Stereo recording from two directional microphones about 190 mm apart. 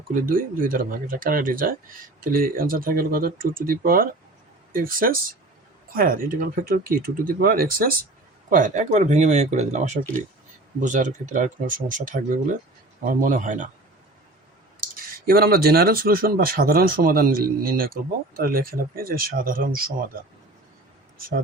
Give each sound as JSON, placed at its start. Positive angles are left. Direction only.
{"t": 0.2, "sound": "speech", "side_deg": -50}
{"t": 14.9, "sound": "speech", "side_deg": -50}